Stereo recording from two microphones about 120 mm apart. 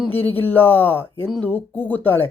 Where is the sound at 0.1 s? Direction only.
15° left (ahead or behind).